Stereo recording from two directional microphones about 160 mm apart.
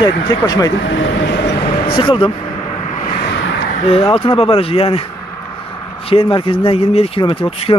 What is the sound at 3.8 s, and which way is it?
Speech, 35° left (ahead or behind).